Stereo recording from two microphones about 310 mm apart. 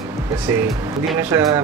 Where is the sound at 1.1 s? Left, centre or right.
Centre.